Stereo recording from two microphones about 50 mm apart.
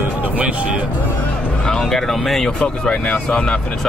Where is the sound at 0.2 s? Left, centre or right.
Right.